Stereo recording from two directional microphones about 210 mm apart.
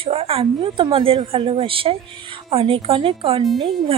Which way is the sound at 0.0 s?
25° right (ahead or behind).